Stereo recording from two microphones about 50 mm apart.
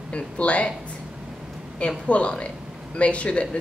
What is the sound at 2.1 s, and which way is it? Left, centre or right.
Speech, left.